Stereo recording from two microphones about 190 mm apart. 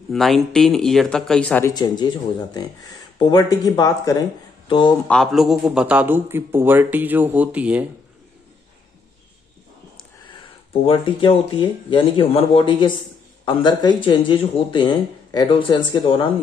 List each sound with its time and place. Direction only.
0.1 s speech: centre (ahead or behind)
1.7 s speech: 20° left (ahead or behind)
5.0 s a man's voice: 5° left (ahead or behind)
10.7 s speech: 25° left (ahead or behind)